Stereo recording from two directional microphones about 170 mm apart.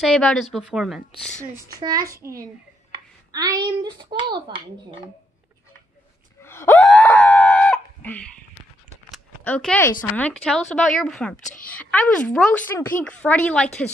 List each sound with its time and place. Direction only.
0.0 s a woman's voice: 5° left (ahead or behind)
1.8 s a child's voice: 25° right (ahead or behind)
6.4 s gasp: 15° left (ahead or behind)
6.8 s screaming: 5° left (ahead or behind)
9.4 s a woman's voice: 10° left (ahead or behind)